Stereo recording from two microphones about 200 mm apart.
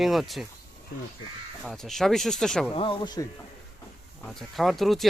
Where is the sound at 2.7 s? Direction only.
25° left (ahead or behind).